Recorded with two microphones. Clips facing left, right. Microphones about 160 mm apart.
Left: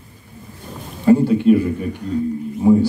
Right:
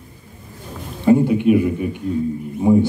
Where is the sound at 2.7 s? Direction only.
20° right (ahead or behind).